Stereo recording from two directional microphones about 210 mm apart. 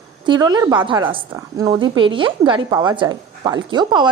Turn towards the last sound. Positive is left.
turn(degrees=-20)  # may be behind; listen again after turning